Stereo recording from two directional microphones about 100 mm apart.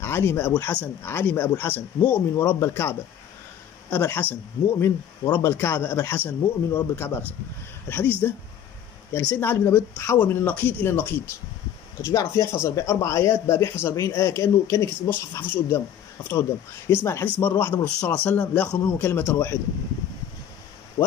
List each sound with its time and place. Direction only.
0.0 s speech: 25° left (ahead or behind)
12.0 s speech: 30° left (ahead or behind)